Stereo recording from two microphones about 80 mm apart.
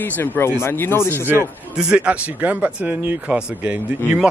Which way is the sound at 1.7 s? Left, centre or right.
Centre.